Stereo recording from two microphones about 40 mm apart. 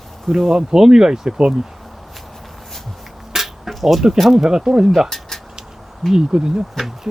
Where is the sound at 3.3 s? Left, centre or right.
Centre.